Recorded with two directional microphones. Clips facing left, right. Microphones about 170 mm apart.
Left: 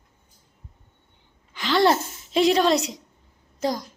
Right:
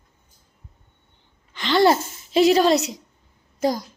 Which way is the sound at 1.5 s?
Centre (ahead or behind).